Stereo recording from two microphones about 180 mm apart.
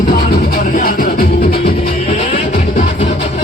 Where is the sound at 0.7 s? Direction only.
50° left (ahead or behind).